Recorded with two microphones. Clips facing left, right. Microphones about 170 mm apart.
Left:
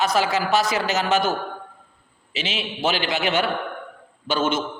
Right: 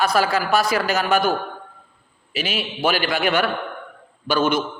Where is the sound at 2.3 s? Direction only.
25° left (ahead or behind).